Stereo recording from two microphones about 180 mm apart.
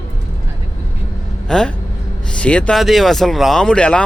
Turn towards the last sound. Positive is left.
turn(degrees=5)  # may be behind; listen again after turning